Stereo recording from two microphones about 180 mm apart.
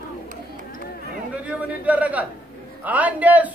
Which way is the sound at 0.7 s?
50° left (ahead or behind).